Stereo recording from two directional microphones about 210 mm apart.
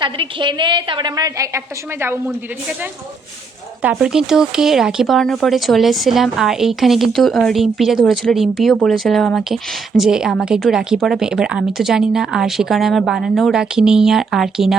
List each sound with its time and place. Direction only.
0.0 s a woman's voice: 25° right (ahead or behind)
3.8 s speech: 5° right (ahead or behind)